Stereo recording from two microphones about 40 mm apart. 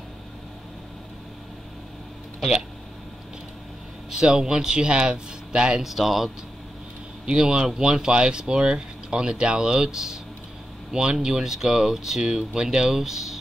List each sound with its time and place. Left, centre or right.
4.1 s speech: centre
5.8 s speech: centre
7.2 s speech: right